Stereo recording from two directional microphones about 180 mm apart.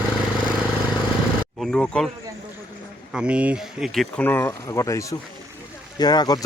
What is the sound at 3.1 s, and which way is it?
Speech, 5° right (ahead or behind).